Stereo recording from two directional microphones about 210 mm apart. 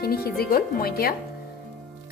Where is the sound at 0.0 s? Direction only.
45° left (ahead or behind).